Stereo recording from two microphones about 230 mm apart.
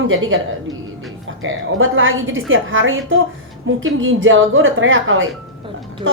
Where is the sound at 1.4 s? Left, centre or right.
Right.